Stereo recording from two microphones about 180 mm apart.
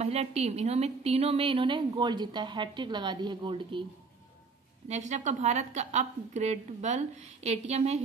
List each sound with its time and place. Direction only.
0.0 s a woman's voice: 35° right (ahead or behind)
4.8 s a woman's voice: 40° right (ahead or behind)